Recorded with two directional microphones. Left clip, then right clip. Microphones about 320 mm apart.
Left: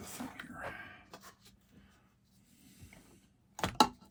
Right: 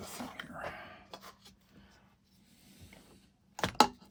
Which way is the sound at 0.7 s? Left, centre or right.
Right.